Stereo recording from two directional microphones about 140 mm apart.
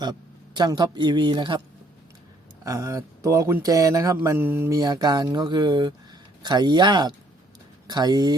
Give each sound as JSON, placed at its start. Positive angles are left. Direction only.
{"t": 0.0, "sound": "speech", "side_deg": -30}
{"t": 2.6, "sound": "speech", "side_deg": -25}